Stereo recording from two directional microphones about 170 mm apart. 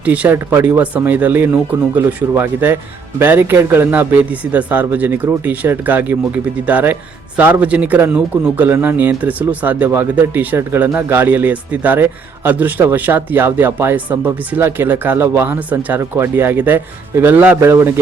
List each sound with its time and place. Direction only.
0.0 s a man's voice: 10° right (ahead or behind)